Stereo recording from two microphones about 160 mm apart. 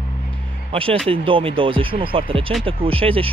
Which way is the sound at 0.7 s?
35° right (ahead or behind).